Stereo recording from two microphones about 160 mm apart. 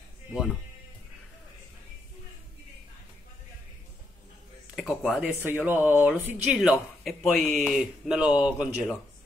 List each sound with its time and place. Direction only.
0.3 s speech: centre (ahead or behind)
4.7 s speech: centre (ahead or behind)